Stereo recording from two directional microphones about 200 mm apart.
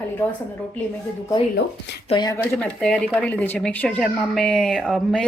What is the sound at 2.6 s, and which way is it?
Speech, 5° left (ahead or behind).